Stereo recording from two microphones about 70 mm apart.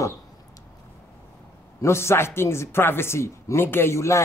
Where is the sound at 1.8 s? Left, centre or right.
Left.